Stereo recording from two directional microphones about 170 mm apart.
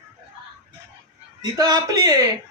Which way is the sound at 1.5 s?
20° right (ahead or behind).